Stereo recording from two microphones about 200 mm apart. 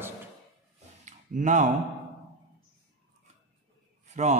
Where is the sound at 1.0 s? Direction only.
35° right (ahead or behind).